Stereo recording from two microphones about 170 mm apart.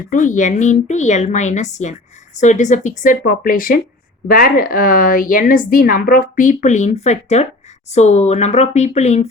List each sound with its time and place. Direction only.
0.1 s a woman's voice: 50° left (ahead or behind)